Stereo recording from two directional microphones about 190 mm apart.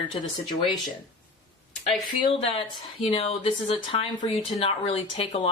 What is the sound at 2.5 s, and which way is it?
Speech, 30° left (ahead or behind).